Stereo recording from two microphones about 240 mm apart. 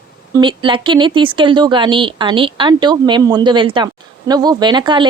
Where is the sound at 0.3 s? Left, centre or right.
Centre.